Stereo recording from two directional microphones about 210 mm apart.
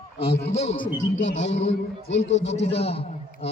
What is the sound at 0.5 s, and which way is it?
Speech, 25° left (ahead or behind).